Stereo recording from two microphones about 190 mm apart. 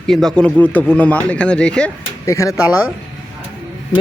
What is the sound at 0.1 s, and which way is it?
Speech, 5° left (ahead or behind).